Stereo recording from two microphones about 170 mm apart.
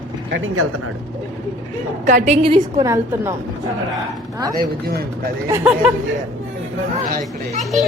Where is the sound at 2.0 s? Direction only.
45° right (ahead or behind); by 3.3 s 15° right (ahead or behind).